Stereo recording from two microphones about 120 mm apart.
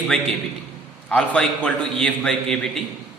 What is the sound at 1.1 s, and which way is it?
A man's voice, 10° left (ahead or behind).